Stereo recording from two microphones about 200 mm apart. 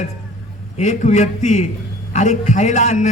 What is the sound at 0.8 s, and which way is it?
A man's voice, 35° left (ahead or behind).